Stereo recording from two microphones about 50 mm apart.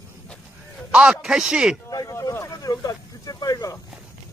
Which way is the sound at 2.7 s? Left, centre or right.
Left.